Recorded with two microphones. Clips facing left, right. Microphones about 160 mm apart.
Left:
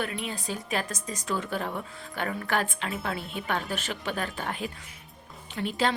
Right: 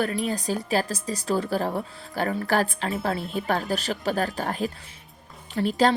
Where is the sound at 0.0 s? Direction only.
40° right (ahead or behind).